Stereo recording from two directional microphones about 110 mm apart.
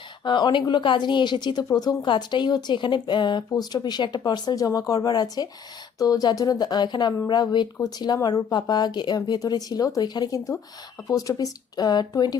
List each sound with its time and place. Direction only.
0.3 s a woman's voice: 45° left (ahead or behind)